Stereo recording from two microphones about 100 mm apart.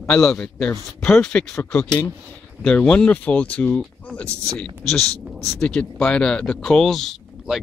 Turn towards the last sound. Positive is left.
turn(degrees=0)  # may be behind; listen again after turning